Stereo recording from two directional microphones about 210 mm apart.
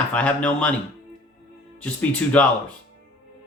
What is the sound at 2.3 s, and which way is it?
Speech, 5° left (ahead or behind).